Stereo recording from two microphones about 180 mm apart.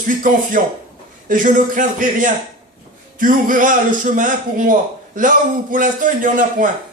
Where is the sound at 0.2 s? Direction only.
50° right (ahead or behind).